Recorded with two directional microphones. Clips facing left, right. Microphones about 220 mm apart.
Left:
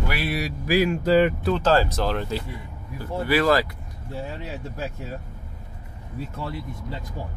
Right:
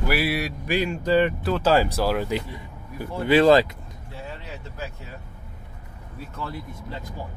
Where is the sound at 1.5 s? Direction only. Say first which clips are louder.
Right 2 dB; 10° right (ahead or behind).